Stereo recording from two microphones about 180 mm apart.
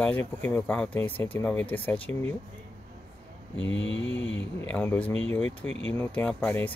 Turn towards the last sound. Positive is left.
turn(degrees=10)  # may be behind; listen again after turning